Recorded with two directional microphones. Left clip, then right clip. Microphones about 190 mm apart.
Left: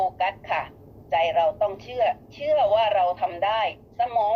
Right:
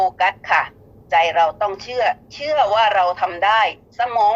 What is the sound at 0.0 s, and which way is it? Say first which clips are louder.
A man's voice: right 7 dB; 35° right (ahead or behind).